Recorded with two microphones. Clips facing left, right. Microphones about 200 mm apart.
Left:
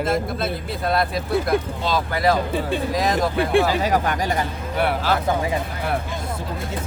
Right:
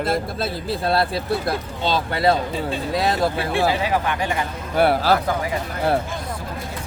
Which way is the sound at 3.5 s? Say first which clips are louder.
Left 2 dB; 45° left (ahead or behind).